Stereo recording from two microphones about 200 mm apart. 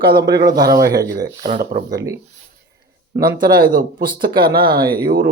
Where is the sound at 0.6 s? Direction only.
50° right (ahead or behind).